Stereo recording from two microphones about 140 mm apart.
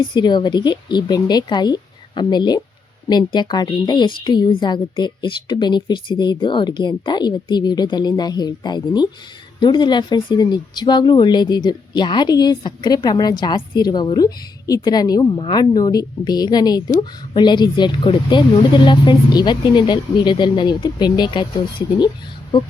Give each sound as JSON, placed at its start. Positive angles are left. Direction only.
{"t": 0.0, "sound": "speech", "side_deg": 35}